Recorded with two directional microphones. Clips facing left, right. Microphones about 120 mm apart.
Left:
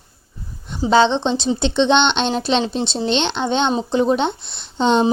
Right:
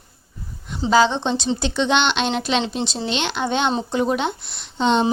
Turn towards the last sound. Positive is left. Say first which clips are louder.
# left 2 dB
turn(degrees=35)  # may be behind; listen again after turning